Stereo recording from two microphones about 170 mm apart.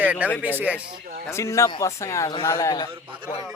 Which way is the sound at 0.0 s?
10° right (ahead or behind).